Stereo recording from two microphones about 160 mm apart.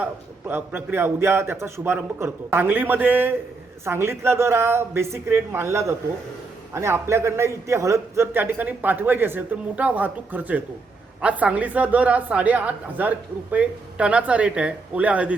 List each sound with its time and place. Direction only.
0.0 s a woman's voice: 15° right (ahead or behind)